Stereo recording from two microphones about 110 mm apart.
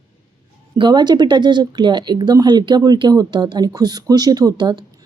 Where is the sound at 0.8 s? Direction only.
40° right (ahead or behind).